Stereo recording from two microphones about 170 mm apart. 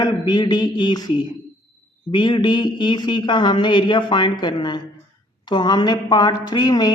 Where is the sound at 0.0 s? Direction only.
25° left (ahead or behind).